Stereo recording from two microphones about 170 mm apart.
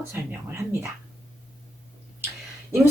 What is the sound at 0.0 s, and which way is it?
Speech, 15° right (ahead or behind).